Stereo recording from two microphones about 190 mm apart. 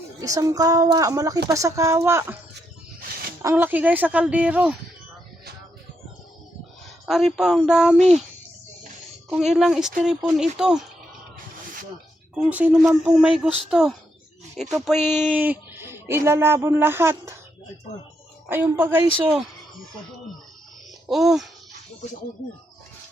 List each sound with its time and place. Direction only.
0.2 s a woman's voice: 20° right (ahead or behind)
3.4 s a woman's voice: 10° right (ahead or behind)
7.0 s speech: centre (ahead or behind)
7.9 s speech: 35° right (ahead or behind)
9.3 s speech: 5° right (ahead or behind)
12.4 s speech: 5° right (ahead or behind)
18.4 s a woman's voice: 10° right (ahead or behind)
21.1 s speech: centre (ahead or behind)